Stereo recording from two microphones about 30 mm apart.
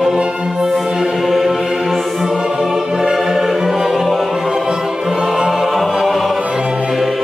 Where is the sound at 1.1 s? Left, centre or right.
Centre.